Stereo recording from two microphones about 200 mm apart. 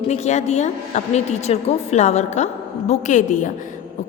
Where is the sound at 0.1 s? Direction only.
35° left (ahead or behind).